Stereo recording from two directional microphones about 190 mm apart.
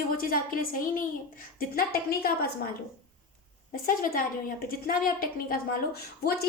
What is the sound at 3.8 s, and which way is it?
A woman's voice, 50° left (ahead or behind).